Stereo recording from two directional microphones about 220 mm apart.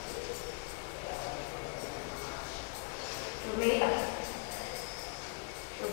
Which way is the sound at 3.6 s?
20° left (ahead or behind).